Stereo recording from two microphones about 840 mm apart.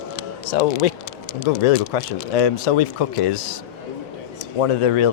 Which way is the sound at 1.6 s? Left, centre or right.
Left.